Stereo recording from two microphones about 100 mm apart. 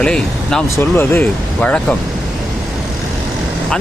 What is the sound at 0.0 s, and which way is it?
Speech, 10° left (ahead or behind).